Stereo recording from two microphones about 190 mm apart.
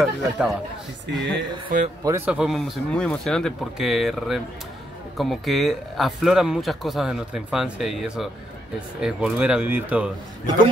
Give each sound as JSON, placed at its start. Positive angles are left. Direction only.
{"t": 0.0, "sound": "speech", "side_deg": 0}
{"t": 1.7, "sound": "speech", "side_deg": -45}
{"t": 2.0, "sound": "speech", "side_deg": -10}